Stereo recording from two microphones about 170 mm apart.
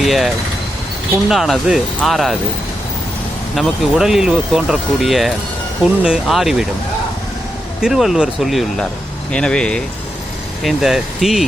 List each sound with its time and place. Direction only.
0.0 s speech: centre (ahead or behind)
1.3 s speech: centre (ahead or behind)
3.5 s speech: centre (ahead or behind)
7.8 s speech: centre (ahead or behind)